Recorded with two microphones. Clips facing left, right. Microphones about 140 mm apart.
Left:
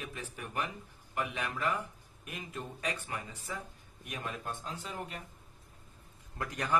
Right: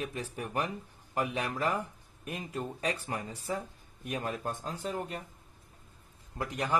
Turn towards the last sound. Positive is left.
turn(degrees=-25)  # may be behind; listen again after turning